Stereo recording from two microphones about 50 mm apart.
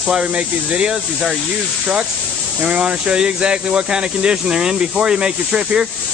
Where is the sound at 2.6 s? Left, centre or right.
Centre.